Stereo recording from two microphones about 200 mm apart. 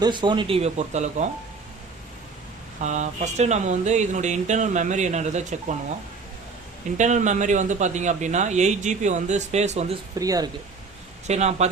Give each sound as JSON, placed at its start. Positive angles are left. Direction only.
{"t": 0.0, "sound": "speech", "side_deg": -20}
{"t": 2.8, "sound": "speech", "side_deg": -35}
{"t": 6.9, "sound": "speech", "side_deg": -35}
{"t": 10.2, "sound": "speech", "side_deg": -20}
{"t": 11.3, "sound": "speech", "side_deg": -35}